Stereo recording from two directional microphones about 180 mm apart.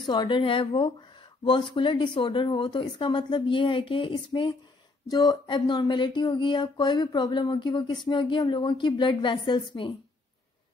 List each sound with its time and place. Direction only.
0.0 s speech: 25° left (ahead or behind)